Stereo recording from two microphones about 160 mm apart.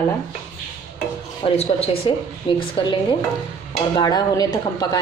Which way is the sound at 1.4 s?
40° left (ahead or behind).